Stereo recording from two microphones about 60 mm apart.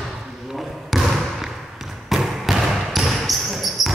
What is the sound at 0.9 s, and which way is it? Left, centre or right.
Trickle, centre.